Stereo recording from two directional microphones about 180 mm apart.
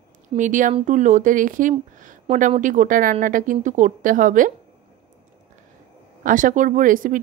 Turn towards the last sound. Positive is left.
turn(degrees=-50)  # may be behind; listen again after turning